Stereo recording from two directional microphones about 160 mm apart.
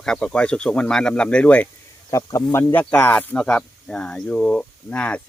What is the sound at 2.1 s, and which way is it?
Speech, 20° left (ahead or behind).